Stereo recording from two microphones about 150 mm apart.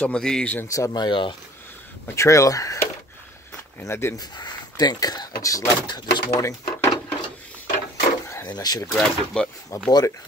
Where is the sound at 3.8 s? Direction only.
20° left (ahead or behind).